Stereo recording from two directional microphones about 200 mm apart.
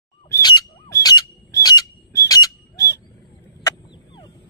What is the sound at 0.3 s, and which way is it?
Squawk, 20° left (ahead or behind).